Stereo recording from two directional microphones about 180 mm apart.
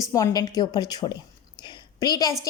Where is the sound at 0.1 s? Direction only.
20° left (ahead or behind).